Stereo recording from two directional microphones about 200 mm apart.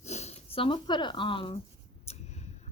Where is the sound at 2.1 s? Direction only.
35° left (ahead or behind).